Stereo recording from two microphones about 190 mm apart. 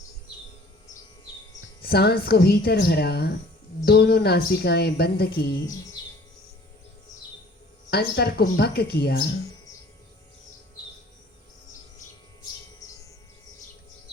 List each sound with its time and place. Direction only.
1.8 s speech: 55° left (ahead or behind)
7.9 s speech: 55° left (ahead or behind)
12.8 s bird: 20° left (ahead or behind)